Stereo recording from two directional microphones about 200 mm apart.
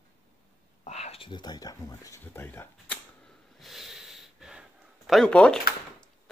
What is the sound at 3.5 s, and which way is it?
Gasp, centre (ahead or behind).